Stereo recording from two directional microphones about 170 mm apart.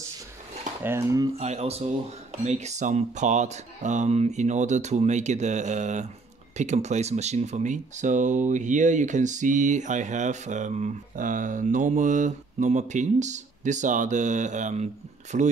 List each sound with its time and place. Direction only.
0.8 s speech: 20° right (ahead or behind)
1.4 s speech: 40° right (ahead or behind)